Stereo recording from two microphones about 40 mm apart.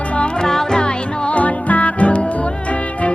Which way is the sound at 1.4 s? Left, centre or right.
Left.